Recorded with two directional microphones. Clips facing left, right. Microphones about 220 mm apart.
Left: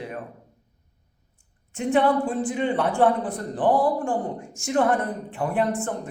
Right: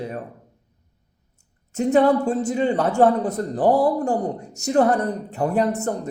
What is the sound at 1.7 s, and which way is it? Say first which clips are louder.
A man's voice: right 4 dB; 40° right (ahead or behind).